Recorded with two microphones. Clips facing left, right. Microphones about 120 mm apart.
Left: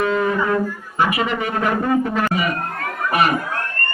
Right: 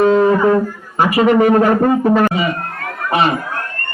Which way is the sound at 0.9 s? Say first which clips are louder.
Right 8 dB; 40° right (ahead or behind).